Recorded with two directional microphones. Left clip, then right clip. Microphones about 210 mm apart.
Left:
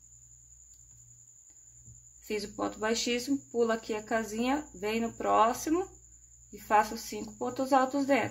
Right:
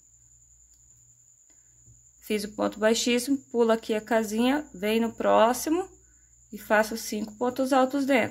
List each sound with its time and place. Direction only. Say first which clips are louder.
2.2 s speech: right 6 dB; 35° right (ahead or behind)